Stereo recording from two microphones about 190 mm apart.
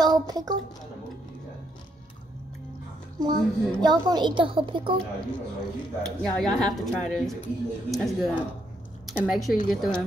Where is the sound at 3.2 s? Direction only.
20° right (ahead or behind).